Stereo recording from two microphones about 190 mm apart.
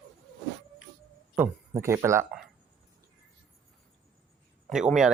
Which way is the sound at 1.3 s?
10° right (ahead or behind).